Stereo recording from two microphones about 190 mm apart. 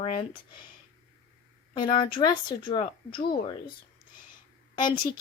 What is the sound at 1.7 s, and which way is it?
Speech, 25° left (ahead or behind).